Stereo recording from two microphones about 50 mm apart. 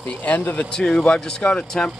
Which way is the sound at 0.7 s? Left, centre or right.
Centre.